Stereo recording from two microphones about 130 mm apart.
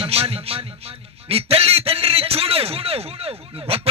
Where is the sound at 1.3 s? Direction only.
50° right (ahead or behind).